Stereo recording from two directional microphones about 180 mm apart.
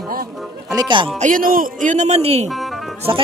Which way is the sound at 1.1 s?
45° right (ahead or behind).